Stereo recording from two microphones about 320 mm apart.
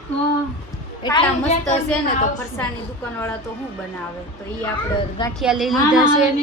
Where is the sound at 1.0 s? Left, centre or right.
Centre.